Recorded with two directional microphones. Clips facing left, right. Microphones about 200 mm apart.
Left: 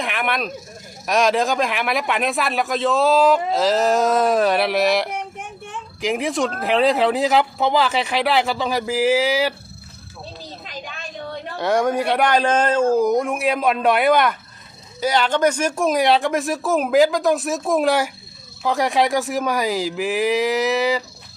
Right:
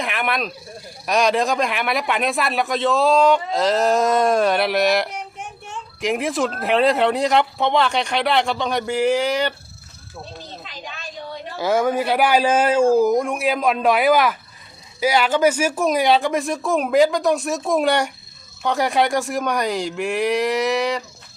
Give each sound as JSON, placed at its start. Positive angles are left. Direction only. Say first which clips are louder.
{"t": 0.0, "sound": "speech", "louder": "even", "side_deg": 0}
{"t": 10.7, "sound": "a sound", "louder": "left 2 dB", "side_deg": 50}
{"t": 11.5, "sound": "speech", "louder": "even", "side_deg": 0}